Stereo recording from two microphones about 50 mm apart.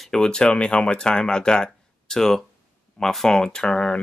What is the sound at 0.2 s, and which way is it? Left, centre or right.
Speech, centre.